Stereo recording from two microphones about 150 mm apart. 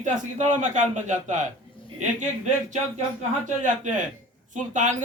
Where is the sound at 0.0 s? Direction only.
55° right (ahead or behind).